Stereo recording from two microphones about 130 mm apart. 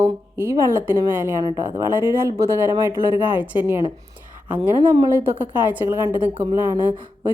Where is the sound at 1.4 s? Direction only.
30° right (ahead or behind).